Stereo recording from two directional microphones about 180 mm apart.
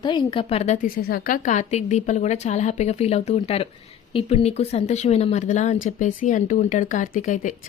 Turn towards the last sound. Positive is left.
turn(degrees=45)  # may be behind; listen again after turning